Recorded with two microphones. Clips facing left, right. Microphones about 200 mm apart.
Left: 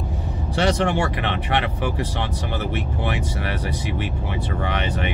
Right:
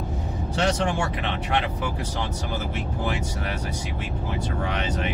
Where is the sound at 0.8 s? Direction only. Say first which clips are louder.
Left 4 dB; 70° left (ahead or behind).